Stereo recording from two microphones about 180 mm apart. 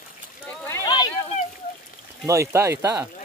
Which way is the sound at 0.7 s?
20° left (ahead or behind).